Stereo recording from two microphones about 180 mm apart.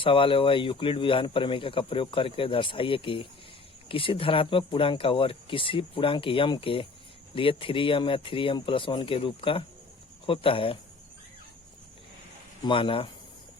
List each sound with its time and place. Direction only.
0.0 s speech: 30° left (ahead or behind)
12.6 s speech: 30° left (ahead or behind)